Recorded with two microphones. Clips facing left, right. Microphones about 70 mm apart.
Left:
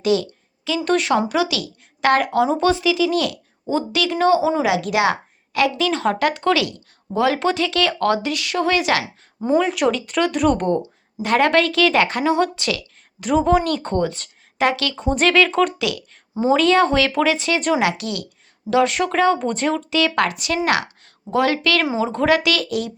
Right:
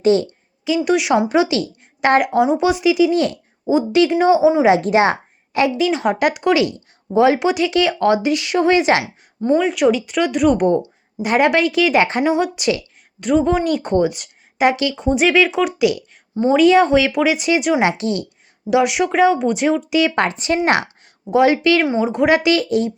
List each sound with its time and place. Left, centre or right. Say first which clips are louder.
0.0 s a woman's voice: right 4 dB; right
0.9 s speech: right 1 dB; centre
1.3 s a woman's voice: right 5 dB; right
4.6 s speech: right 5 dB; right
5.5 s speech: right 2 dB; centre
9.6 s speech: right 2 dB; centre
14.9 s speech: right 2 dB; centre
15.8 s speech: right 7 dB; centre
17.7 s speech: right 3 dB; right
18.7 s speech: right 2 dB; centre; by 20.6 s right
21.2 s speech: right 5 dB; centre